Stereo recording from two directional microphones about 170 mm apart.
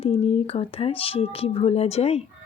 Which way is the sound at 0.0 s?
35° left (ahead or behind).